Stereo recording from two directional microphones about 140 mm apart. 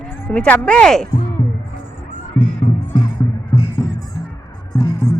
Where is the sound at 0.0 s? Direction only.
10° left (ahead or behind).